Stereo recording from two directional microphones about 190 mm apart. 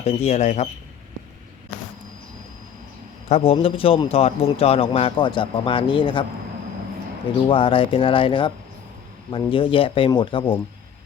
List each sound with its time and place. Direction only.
0.0 s speech: 35° left (ahead or behind)
3.2 s a man's voice: 30° left (ahead or behind)
7.4 s a man's voice: 25° left (ahead or behind)